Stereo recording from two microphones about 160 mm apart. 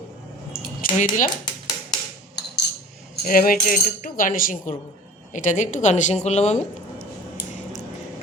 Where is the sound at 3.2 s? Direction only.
65° left (ahead or behind); by 6.6 s 45° left (ahead or behind).